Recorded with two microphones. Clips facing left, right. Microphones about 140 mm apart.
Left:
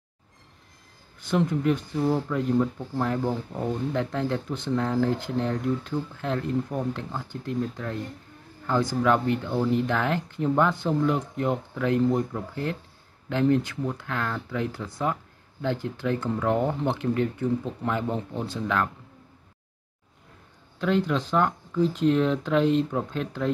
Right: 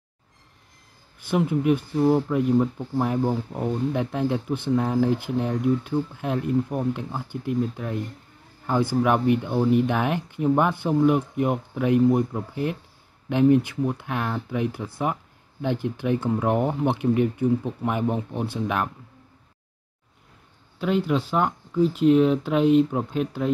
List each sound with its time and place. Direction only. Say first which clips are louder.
1.2 s speech: right 2 dB; 10° right (ahead or behind)
9.0 s speech: right 2 dB; 15° right (ahead or behind)
20.8 s speech: right 1 dB; 10° right (ahead or behind)